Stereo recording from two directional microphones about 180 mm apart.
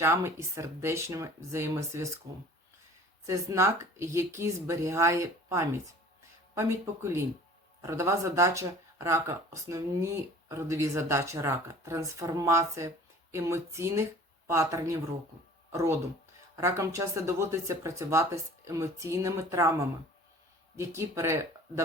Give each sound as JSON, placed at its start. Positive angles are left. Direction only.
{"t": 0.0, "sound": "speech", "side_deg": -15}